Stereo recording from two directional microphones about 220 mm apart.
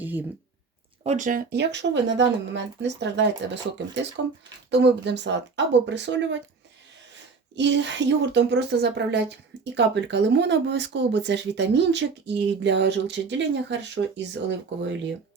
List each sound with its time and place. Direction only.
0.0 s a sound: 10° right (ahead or behind)
1.0 s speech: 35° right (ahead or behind); by 6.4 s 55° right (ahead or behind)
7.5 s speech: 55° right (ahead or behind)